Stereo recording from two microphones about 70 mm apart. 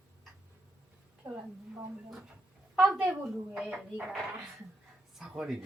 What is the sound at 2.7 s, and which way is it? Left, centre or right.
A woman's voice, centre.